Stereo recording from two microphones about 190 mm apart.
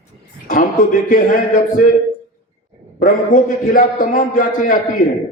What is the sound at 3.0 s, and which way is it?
A man's voice, 45° left (ahead or behind).